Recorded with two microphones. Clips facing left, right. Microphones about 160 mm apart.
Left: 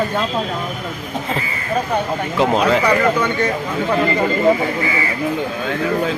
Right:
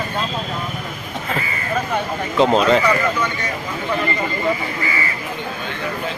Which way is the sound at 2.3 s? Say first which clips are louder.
Right 1 dB; 15° left (ahead or behind).